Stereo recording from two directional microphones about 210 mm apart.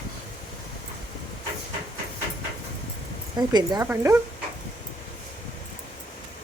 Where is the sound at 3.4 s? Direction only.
20° right (ahead or behind).